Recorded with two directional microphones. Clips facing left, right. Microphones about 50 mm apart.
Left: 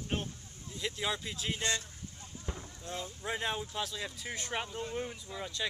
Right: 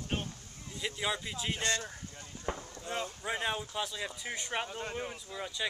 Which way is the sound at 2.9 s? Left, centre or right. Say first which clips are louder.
Right 4 dB; right.